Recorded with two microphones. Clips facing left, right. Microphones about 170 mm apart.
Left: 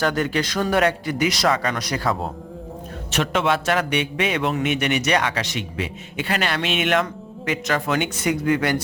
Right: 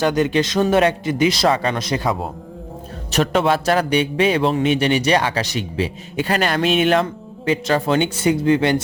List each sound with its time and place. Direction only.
0.0 s speech: 20° right (ahead or behind)
3.1 s a man's voice: 35° right (ahead or behind)